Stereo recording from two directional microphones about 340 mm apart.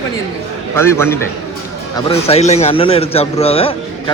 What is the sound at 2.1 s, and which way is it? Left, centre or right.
A man's voice, centre.